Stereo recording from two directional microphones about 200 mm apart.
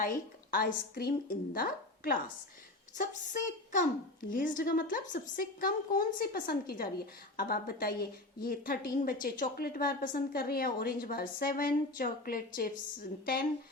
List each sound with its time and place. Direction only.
0.5 s a woman's voice: 50° left (ahead or behind)